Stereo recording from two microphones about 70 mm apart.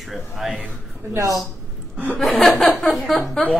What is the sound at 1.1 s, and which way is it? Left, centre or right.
Speech, right.